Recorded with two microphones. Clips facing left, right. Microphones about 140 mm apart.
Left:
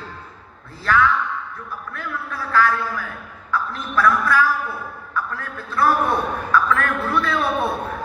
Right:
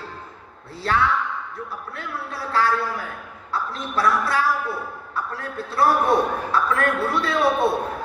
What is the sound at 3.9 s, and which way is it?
A woman's voice, 35° right (ahead or behind).